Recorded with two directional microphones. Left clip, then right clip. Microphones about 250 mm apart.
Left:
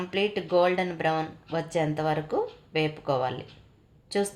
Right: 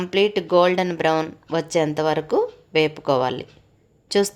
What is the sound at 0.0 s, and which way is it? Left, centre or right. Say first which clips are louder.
Speech: right 8 dB; right.